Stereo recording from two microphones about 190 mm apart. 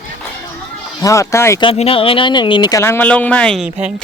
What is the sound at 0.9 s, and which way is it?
Speech, 15° left (ahead or behind).